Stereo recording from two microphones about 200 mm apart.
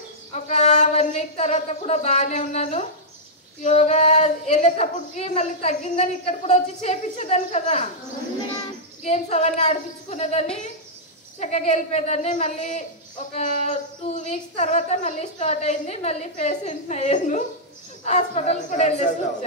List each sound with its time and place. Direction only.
0.3 s a sound: 35° left (ahead or behind)
3.6 s speech: 35° left (ahead or behind)
9.0 s speech: 35° left (ahead or behind)